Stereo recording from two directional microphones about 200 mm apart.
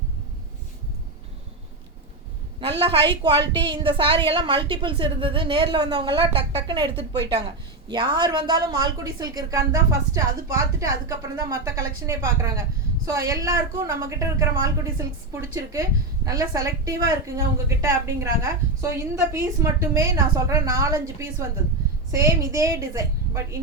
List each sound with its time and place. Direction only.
2.6 s a woman's voice: 30° right (ahead or behind)